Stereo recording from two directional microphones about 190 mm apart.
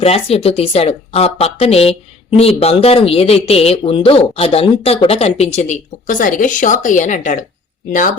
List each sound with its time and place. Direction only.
0.0 s speech: 30° left (ahead or behind)